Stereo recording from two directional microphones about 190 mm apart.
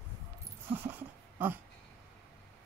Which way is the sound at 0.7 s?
10° right (ahead or behind).